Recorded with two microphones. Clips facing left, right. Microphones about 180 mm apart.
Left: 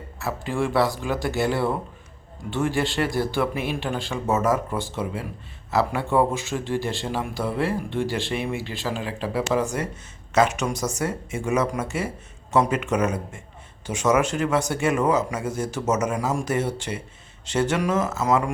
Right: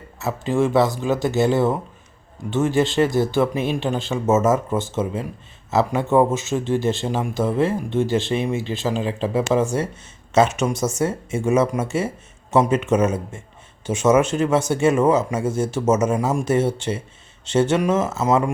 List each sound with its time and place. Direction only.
0.2 s speech: 20° right (ahead or behind)